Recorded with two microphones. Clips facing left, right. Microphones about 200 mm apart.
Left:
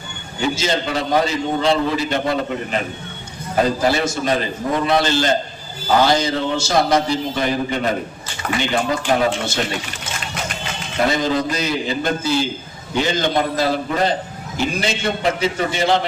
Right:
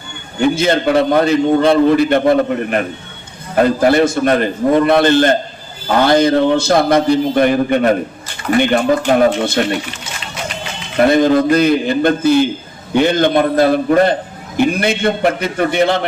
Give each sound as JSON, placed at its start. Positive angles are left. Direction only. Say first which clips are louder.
{"t": 0.3, "sound": "a man's voice", "louder": "right 7 dB", "side_deg": -55}
{"t": 11.0, "sound": "a man's voice", "louder": "right 8 dB", "side_deg": -55}